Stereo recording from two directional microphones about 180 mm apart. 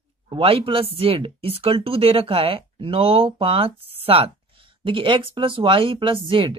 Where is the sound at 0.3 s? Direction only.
30° right (ahead or behind).